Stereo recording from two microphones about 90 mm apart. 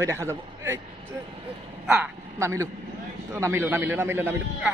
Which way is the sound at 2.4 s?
35° right (ahead or behind).